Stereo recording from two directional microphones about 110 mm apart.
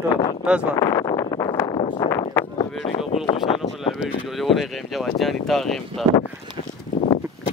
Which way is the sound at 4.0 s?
Centre (ahead or behind).